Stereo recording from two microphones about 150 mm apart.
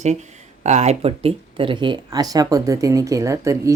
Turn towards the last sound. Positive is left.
turn(degrees=-20)  # may be behind; listen again after turning